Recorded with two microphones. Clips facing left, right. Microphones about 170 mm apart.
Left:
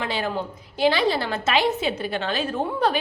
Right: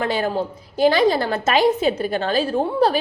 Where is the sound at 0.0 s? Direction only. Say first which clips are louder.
Right 5 dB; 40° right (ahead or behind).